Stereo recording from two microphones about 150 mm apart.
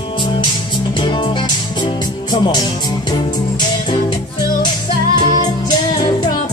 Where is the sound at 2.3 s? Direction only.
30° left (ahead or behind).